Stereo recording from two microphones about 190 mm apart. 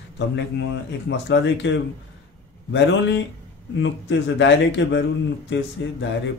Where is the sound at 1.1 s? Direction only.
65° left (ahead or behind).